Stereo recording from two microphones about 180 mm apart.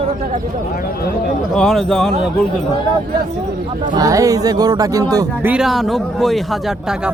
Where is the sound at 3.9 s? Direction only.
20° right (ahead or behind).